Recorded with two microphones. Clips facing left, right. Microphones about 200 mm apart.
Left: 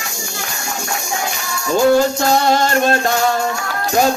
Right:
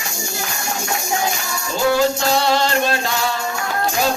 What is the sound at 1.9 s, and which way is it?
Music, 50° left (ahead or behind).